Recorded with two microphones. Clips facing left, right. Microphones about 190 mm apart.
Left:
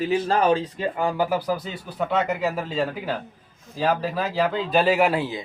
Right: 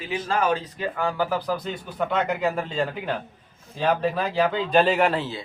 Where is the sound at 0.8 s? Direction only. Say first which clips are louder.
Left 2 dB; 20° left (ahead or behind).